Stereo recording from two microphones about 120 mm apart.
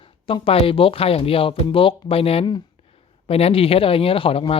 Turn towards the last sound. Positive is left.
turn(degrees=50)  # may be behind; listen again after turning